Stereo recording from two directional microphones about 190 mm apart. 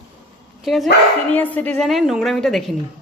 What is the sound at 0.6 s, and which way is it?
A woman's voice, centre (ahead or behind).